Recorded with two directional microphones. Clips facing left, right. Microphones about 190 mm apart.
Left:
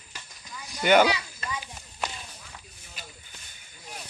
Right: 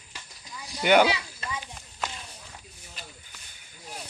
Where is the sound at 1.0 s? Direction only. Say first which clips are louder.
Left 1 dB; 25° right (ahead or behind).